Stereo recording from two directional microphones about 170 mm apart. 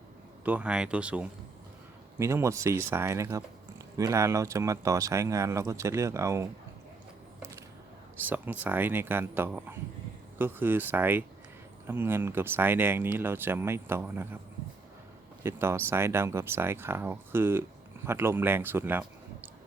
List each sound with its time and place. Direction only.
0.4 s speech: 10° right (ahead or behind)
7.3 s a sound: 15° right (ahead or behind)
8.3 s speech: 10° right (ahead or behind)
15.4 s speech: 15° right (ahead or behind)